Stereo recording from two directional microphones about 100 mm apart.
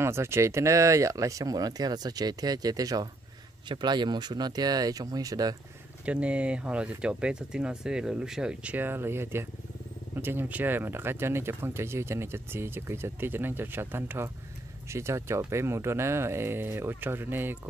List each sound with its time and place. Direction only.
0.0 s speech: 25° right (ahead or behind)
3.6 s speech: 50° right (ahead or behind)
6.0 s speech: 10° right (ahead or behind)
8.7 s speech: 20° right (ahead or behind)